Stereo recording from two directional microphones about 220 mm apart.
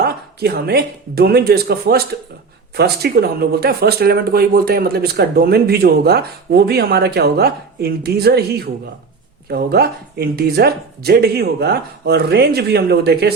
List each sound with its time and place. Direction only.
0.0 s speech: 45° right (ahead or behind)